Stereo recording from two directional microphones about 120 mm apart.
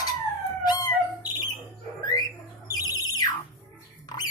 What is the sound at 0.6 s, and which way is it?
Squawk, 35° left (ahead or behind).